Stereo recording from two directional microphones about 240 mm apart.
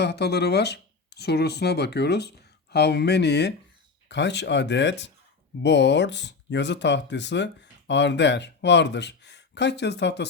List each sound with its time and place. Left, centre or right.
0.0 s speech: left